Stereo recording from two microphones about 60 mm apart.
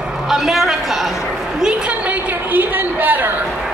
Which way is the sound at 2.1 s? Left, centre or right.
Right.